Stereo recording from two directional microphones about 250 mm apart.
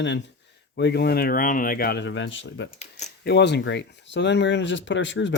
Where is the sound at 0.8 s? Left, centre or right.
Left.